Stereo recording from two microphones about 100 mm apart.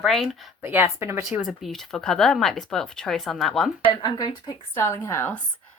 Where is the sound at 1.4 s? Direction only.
Centre (ahead or behind).